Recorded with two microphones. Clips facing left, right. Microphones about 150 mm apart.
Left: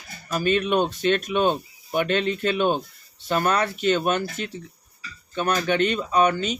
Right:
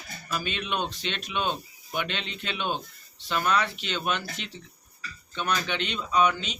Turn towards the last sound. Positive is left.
turn(degrees=50)  # may be behind; listen again after turning